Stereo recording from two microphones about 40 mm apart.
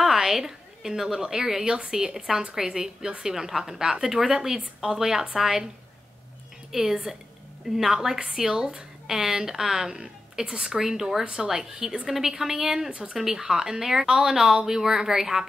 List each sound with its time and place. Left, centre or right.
0.0 s a woman's voice: centre
6.7 s a woman's voice: centre